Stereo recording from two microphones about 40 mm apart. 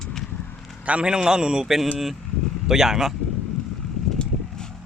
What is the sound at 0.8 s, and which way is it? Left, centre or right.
Speech, right.